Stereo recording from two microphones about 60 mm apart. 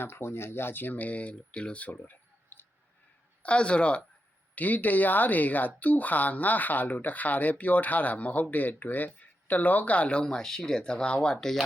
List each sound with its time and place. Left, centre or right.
0.0 s speech: left
3.4 s speech: centre